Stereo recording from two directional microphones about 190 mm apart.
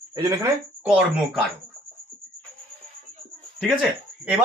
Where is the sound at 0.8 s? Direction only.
5° right (ahead or behind).